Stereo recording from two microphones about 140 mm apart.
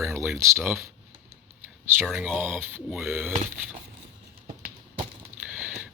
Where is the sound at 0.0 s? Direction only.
20° right (ahead or behind).